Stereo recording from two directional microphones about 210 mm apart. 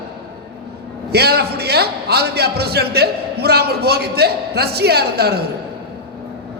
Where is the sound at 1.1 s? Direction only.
50° right (ahead or behind).